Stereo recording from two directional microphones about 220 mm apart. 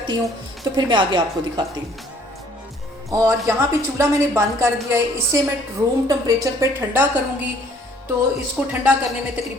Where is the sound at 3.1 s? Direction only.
15° right (ahead or behind).